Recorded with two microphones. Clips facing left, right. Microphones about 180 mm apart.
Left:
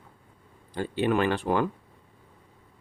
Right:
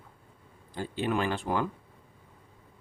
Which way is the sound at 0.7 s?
65° left (ahead or behind).